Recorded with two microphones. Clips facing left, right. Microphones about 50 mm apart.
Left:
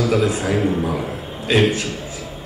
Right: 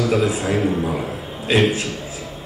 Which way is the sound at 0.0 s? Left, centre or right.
Centre.